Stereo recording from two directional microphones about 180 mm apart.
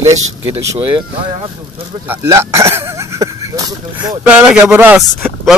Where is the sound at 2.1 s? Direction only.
15° right (ahead or behind).